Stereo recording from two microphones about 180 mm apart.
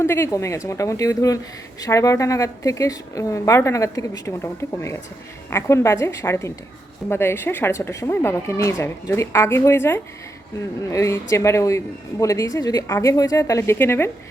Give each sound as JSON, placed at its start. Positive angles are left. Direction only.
{"t": 0.0, "sound": "speech", "side_deg": 15}
{"t": 5.5, "sound": "speech", "side_deg": 15}